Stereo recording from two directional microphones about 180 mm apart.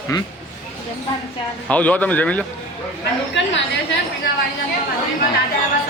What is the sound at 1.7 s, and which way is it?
Speech, 10° left (ahead or behind).